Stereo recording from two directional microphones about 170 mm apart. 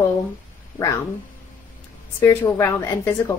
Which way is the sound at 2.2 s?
15° left (ahead or behind).